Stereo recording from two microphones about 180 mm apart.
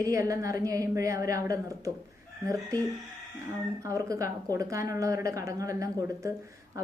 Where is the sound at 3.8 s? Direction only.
20° right (ahead or behind).